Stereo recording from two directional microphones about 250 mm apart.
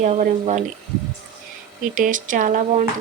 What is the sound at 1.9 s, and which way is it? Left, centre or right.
Speech, right.